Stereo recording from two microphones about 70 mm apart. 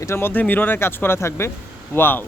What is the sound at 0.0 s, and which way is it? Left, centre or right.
Speech, left.